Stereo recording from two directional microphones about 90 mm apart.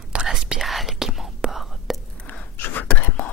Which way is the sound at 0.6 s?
Centre (ahead or behind).